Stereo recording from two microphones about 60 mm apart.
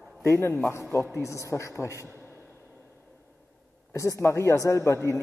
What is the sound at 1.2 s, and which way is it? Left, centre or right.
Speech, left.